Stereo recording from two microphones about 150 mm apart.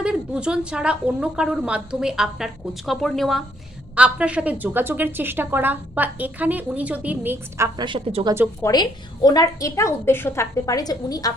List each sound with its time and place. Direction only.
0.0 s a woman's voice: 5° right (ahead or behind)
7.8 s a woman's voice: 35° right (ahead or behind)
8.6 s a woman's voice: 25° left (ahead or behind)